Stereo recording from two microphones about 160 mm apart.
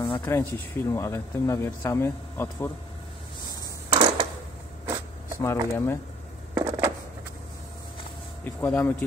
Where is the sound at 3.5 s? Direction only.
30° right (ahead or behind).